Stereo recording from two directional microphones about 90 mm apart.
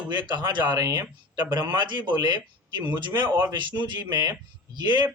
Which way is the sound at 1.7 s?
55° right (ahead or behind).